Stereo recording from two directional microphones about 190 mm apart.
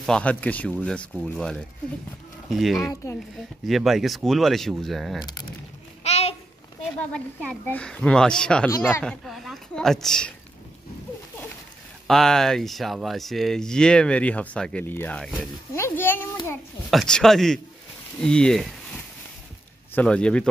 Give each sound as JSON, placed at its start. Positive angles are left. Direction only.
{"t": 0.0, "sound": "speech", "side_deg": 5}
{"t": 5.2, "sound": "speech", "side_deg": 20}
{"t": 6.0, "sound": "a sound", "side_deg": 35}
{"t": 7.1, "sound": "a woman's voice", "side_deg": 5}
{"t": 12.1, "sound": "speech", "side_deg": 0}
{"t": 15.7, "sound": "a sound", "side_deg": 10}
{"t": 16.9, "sound": "speech", "side_deg": 0}
{"t": 19.9, "sound": "speech", "side_deg": 5}